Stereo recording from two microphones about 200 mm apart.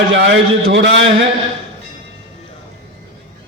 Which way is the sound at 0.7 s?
65° right (ahead or behind).